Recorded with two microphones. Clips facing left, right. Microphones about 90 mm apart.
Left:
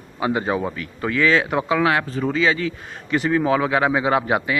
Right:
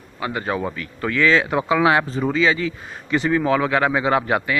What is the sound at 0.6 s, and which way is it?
A man's voice, 10° left (ahead or behind).